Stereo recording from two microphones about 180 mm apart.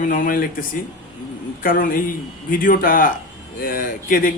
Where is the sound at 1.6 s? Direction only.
50° left (ahead or behind).